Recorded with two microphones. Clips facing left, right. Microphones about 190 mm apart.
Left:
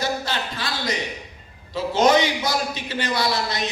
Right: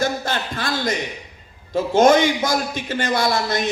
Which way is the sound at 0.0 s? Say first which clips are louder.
Right 3 dB; 50° right (ahead or behind).